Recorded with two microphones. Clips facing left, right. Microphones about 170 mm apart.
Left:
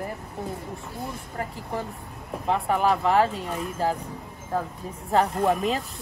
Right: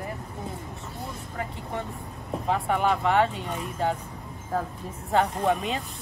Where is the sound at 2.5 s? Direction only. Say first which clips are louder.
Left 2 dB; centre (ahead or behind).